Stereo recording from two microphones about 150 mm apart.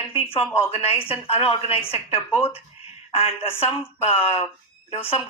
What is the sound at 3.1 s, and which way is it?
A woman's voice, 40° left (ahead or behind).